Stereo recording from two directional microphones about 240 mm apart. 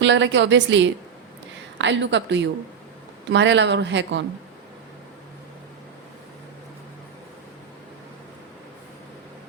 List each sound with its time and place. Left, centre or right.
0.0 s a woman's voice: right